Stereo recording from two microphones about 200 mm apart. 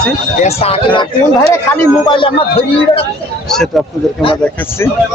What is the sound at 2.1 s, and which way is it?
Speech, 25° left (ahead or behind).